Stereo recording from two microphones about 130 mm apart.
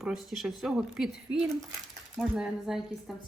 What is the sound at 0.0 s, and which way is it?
Speech, centre (ahead or behind).